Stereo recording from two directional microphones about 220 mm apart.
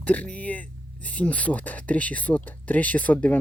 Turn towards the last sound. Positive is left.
turn(degrees=5)  # may be behind; listen again after turning